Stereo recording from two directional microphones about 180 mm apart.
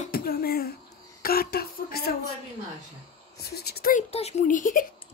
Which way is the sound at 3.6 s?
60° left (ahead or behind).